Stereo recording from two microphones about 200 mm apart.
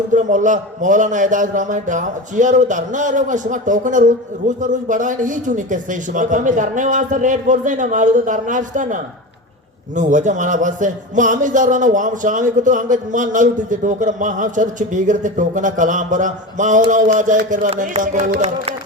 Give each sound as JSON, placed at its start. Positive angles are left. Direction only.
{"t": 0.1, "sound": "a man's voice", "side_deg": -40}